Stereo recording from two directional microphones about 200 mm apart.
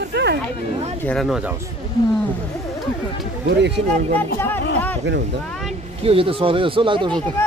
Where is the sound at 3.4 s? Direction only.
60° right (ahead or behind).